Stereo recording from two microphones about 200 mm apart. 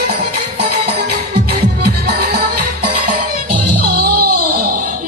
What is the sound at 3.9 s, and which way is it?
Music, 50° right (ahead or behind).